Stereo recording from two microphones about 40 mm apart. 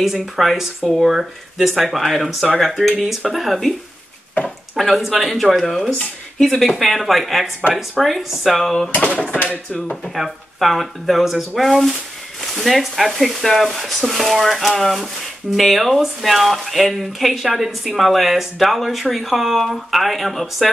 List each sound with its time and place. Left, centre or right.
0.0 s speech: centre
4.7 s speech: centre
5.7 s speech: centre
8.9 s speech: left
10.1 s speech: centre